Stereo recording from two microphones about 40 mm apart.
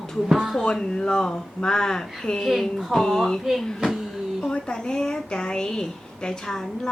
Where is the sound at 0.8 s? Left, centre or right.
Left; by 3.9 s centre.